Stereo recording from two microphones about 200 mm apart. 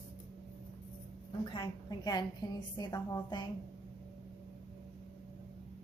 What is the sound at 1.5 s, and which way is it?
A woman's voice, 20° left (ahead or behind).